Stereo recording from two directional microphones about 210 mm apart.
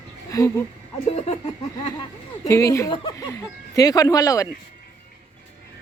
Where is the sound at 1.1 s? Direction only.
30° left (ahead or behind).